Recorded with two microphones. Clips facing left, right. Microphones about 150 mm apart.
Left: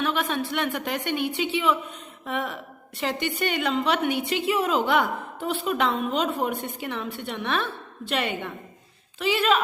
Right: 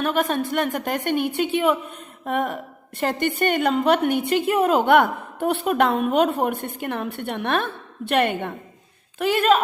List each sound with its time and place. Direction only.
0.0 s a woman's voice: 45° right (ahead or behind)